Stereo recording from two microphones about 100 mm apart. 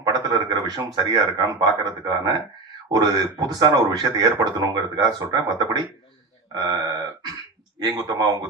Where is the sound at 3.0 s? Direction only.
40° right (ahead or behind).